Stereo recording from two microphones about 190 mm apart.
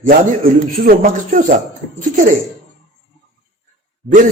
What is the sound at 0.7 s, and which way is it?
A man's voice, 50° right (ahead or behind).